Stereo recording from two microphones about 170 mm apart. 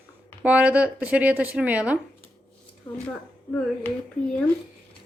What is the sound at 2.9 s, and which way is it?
Speech, 25° left (ahead or behind).